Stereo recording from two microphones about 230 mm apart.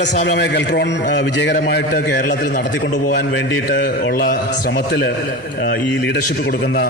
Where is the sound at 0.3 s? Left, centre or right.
Left.